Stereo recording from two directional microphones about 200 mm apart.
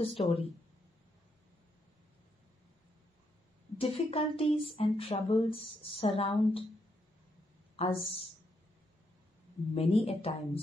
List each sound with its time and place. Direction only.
0.2 s speech: 30° left (ahead or behind)
3.7 s speech: 30° left (ahead or behind)
7.7 s speech: 30° left (ahead or behind)
9.8 s speech: 30° left (ahead or behind)